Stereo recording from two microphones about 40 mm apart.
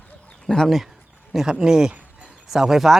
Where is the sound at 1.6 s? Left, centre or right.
Centre.